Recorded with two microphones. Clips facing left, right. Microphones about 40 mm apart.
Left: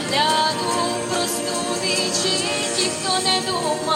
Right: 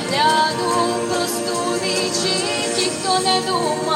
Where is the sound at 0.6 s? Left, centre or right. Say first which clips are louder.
Right 3 dB; right.